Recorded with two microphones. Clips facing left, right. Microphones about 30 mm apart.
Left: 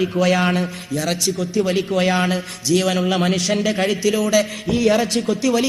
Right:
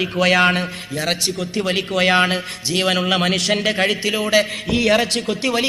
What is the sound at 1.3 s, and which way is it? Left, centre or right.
Speech, right.